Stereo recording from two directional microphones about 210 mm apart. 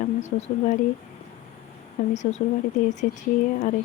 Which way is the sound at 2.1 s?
35° left (ahead or behind).